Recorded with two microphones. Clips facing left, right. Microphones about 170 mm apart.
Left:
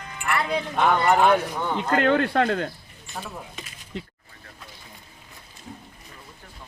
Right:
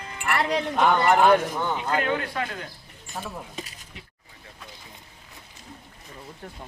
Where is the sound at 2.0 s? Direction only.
65° left (ahead or behind).